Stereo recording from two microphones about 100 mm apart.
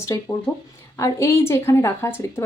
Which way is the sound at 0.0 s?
30° left (ahead or behind).